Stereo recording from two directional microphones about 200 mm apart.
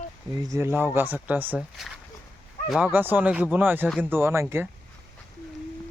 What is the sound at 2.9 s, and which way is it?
Speech, 10° right (ahead or behind).